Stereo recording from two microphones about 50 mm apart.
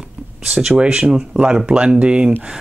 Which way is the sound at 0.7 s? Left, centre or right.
Right.